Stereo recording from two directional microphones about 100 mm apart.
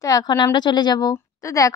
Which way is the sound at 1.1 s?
35° left (ahead or behind).